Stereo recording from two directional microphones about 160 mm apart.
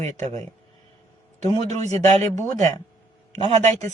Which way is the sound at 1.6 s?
45° right (ahead or behind).